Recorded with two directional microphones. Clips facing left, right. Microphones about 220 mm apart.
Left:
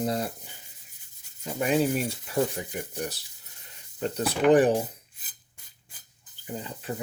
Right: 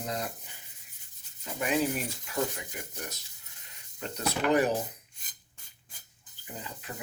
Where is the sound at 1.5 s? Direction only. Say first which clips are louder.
Left 5 dB; 35° left (ahead or behind).